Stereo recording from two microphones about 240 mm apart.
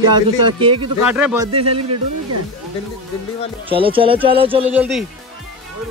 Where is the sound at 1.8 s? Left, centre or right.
Right.